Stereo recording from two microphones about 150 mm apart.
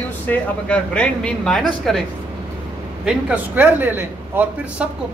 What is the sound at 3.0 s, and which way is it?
A man's voice, 10° right (ahead or behind).